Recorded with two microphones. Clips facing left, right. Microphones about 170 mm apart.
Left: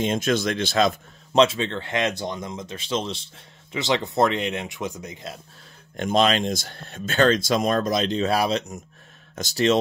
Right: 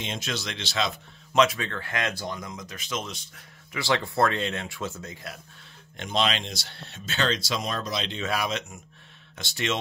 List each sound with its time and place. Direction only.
0.0 s speech: 50° left (ahead or behind)
1.3 s speech: 30° left (ahead or behind)
5.9 s speech: 45° left (ahead or behind)